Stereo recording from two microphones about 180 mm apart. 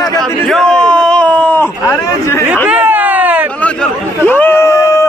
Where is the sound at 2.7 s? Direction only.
10° right (ahead or behind).